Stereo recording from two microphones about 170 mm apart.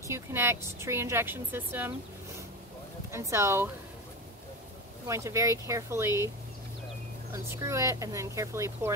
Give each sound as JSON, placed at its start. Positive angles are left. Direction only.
{"t": 0.1, "sound": "a woman's voice", "side_deg": -15}
{"t": 3.1, "sound": "a woman's voice", "side_deg": -15}
{"t": 5.0, "sound": "a woman's voice", "side_deg": -15}
{"t": 7.4, "sound": "a woman's voice", "side_deg": -15}